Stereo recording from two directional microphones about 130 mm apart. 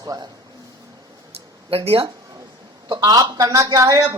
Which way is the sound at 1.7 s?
45° right (ahead or behind).